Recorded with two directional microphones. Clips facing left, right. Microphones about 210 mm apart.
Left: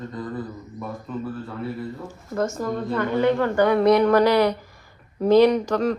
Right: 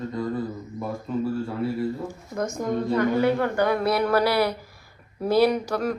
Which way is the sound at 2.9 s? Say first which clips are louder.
Left 1 dB; 5° right (ahead or behind).